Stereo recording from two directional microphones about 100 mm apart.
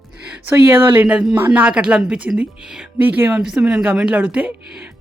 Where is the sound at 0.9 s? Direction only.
15° right (ahead or behind).